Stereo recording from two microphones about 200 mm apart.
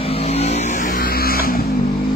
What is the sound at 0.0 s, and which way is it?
Vehicle, 30° left (ahead or behind).